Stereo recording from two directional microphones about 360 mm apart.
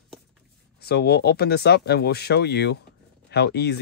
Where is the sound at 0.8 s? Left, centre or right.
Left.